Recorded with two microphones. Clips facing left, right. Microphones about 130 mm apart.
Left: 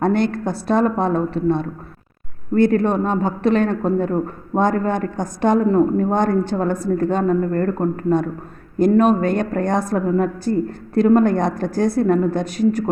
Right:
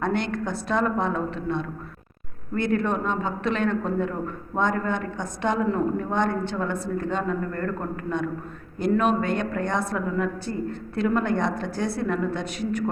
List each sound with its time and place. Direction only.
0.0 s a man's voice: 35° left (ahead or behind)